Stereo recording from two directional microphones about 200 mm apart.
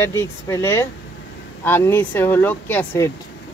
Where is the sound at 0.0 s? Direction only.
10° left (ahead or behind).